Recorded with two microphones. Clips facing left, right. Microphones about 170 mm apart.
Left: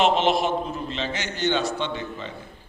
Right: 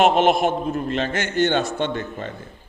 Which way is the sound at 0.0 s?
50° right (ahead or behind).